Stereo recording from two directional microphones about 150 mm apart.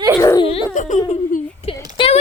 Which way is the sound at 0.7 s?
55° left (ahead or behind).